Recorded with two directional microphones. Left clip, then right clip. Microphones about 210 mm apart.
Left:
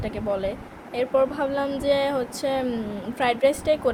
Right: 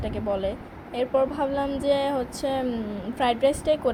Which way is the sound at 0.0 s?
5° right (ahead or behind).